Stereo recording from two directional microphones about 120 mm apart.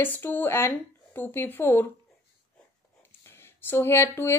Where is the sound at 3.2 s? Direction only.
20° left (ahead or behind).